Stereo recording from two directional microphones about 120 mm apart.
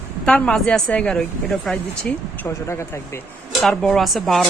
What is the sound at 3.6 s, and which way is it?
Speech, 5° left (ahead or behind).